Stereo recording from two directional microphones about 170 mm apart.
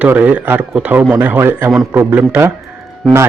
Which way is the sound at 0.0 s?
10° right (ahead or behind).